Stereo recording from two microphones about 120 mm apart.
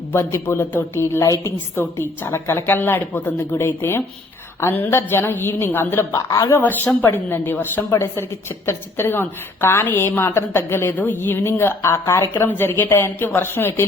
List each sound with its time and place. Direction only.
0.1 s a woman's voice: 20° left (ahead or behind)
6.6 s a woman's voice: 15° left (ahead or behind)